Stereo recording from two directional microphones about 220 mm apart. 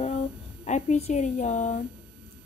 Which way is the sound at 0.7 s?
30° left (ahead or behind).